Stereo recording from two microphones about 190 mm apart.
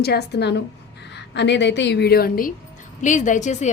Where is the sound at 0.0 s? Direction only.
60° left (ahead or behind).